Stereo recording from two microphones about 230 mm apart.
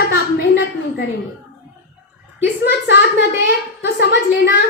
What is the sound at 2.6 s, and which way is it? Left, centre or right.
A woman's voice, left.